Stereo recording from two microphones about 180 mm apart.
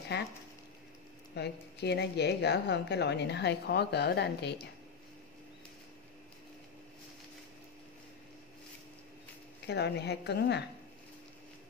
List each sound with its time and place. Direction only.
0.1 s a woman's voice: 70° left (ahead or behind)
1.3 s a woman's voice: 70° left (ahead or behind)
9.7 s a woman's voice: 70° left (ahead or behind)